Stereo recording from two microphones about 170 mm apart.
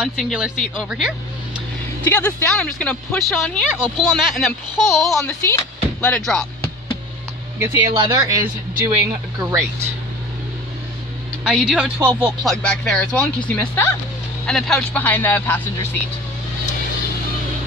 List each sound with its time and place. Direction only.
0.0 s speech: 5° right (ahead or behind)
2.0 s speech: 10° left (ahead or behind)
5.2 s speech: 10° left (ahead or behind)
7.5 s speech: 15° right (ahead or behind)
9.4 s speech: 20° right (ahead or behind)
11.4 s speech: 5° right (ahead or behind)
12.4 s speech: 5° left (ahead or behind)